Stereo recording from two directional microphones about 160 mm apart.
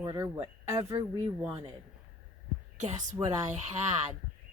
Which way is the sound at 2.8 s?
45° right (ahead or behind).